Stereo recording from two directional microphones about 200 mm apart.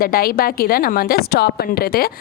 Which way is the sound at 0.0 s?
45° left (ahead or behind).